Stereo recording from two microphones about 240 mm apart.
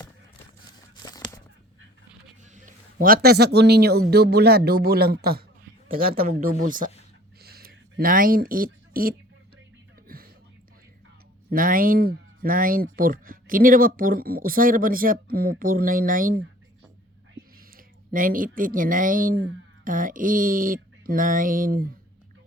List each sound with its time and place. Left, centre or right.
1.0 s a sound: centre
2.4 s a man's voice: right
7.3 s a sound: right
10.1 s whispering: right
11.5 s speech: right
17.6 s speech: right